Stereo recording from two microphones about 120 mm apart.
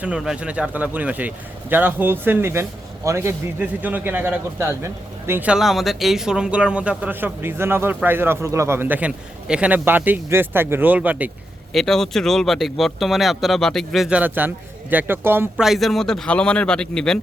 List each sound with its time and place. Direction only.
0.0 s speech: 5° right (ahead or behind)
5.5 s speech: 5° right (ahead or behind)
11.7 s speech: centre (ahead or behind)
14.2 s speech: 15° right (ahead or behind)
15.5 s speech: centre (ahead or behind)